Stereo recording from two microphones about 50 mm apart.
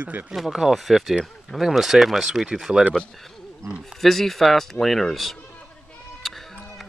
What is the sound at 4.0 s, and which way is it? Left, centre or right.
Speech, centre.